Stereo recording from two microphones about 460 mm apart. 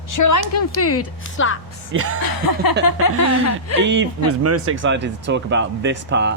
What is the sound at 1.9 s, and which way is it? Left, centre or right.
Speech, right.